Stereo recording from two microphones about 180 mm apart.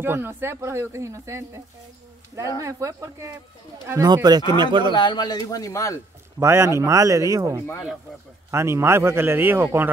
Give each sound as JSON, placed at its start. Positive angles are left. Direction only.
{"t": 0.0, "sound": "speech", "side_deg": -15}
{"t": 2.6, "sound": "speech", "side_deg": -15}
{"t": 4.9, "sound": "speech", "side_deg": 25}
{"t": 6.4, "sound": "speech", "side_deg": -15}